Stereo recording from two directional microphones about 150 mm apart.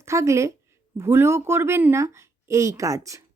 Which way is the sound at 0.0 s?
20° right (ahead or behind).